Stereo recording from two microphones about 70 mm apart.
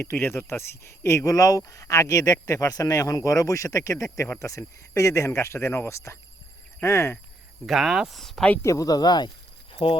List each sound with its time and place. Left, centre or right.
0.0 s speech: left
7.7 s speech: centre
8.6 s speech: left